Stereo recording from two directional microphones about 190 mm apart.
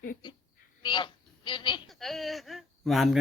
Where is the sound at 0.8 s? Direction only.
25° left (ahead or behind).